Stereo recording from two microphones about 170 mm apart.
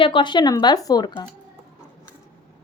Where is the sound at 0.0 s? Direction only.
30° left (ahead or behind).